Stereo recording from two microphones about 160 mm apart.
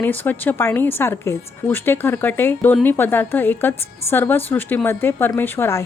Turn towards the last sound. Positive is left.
turn(degrees=15)  # may be behind; listen again after turning